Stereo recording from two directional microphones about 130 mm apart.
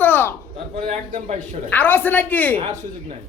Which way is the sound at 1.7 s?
15° left (ahead or behind).